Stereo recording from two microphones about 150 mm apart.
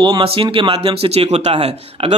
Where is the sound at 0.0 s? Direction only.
35° right (ahead or behind).